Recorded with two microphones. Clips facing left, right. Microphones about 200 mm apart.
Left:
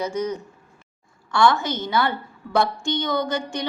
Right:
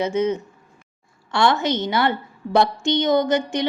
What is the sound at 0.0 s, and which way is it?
A woman's voice, 25° right (ahead or behind).